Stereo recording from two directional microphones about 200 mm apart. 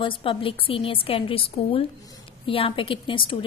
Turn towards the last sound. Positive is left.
turn(degrees=25)  # may be behind; listen again after turning